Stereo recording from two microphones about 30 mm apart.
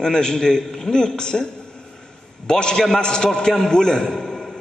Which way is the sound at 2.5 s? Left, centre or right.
Left.